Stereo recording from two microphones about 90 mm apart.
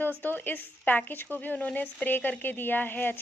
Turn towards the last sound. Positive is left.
turn(degrees=20)  # may be behind; listen again after turning